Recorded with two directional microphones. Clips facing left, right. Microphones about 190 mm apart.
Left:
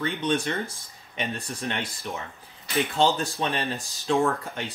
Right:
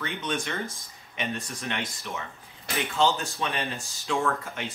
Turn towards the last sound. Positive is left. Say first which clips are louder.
# left 4 dB
turn(degrees=35)  # may be behind; listen again after turning